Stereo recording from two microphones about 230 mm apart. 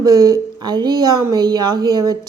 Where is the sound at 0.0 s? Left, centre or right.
Centre.